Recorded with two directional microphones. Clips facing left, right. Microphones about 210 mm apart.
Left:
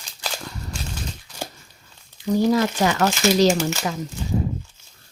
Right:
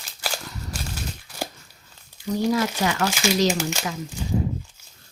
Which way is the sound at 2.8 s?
35° left (ahead or behind).